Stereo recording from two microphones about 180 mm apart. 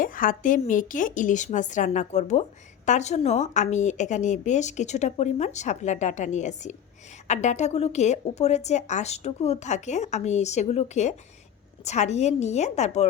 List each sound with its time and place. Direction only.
0.0 s a woman's voice: 50° left (ahead or behind)